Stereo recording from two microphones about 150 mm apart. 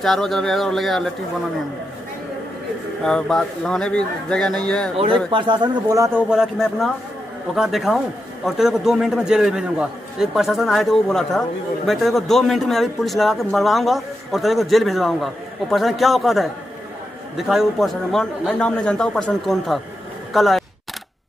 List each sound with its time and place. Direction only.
0.0 s a man's voice: centre (ahead or behind)
3.0 s a man's voice: 5° left (ahead or behind)
5.3 s a man's voice: 30° right (ahead or behind)
6.3 s a man's voice: centre (ahead or behind)